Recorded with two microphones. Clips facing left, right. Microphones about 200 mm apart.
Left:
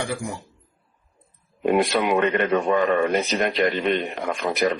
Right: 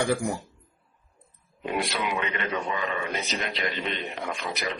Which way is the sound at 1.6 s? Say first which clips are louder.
Left 9 dB; 50° left (ahead or behind).